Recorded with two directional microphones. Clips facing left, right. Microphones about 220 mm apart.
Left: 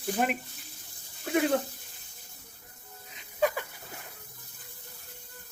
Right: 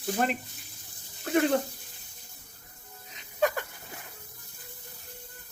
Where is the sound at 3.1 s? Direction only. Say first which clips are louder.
Right 1 dB; 5° left (ahead or behind).